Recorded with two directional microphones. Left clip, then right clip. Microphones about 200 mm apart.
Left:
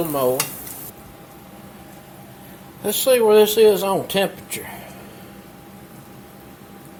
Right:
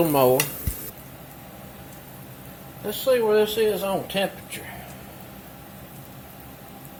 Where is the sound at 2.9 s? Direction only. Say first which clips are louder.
Left 5 dB; 35° left (ahead or behind).